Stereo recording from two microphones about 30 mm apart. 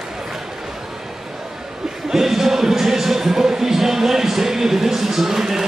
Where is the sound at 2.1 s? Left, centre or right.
Centre.